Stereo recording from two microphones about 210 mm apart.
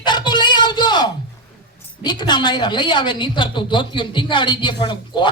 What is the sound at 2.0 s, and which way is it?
A woman's voice, 20° left (ahead or behind).